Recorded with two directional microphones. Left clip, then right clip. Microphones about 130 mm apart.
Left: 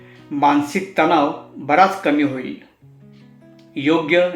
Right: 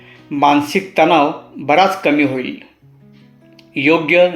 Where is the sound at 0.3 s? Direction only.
40° right (ahead or behind).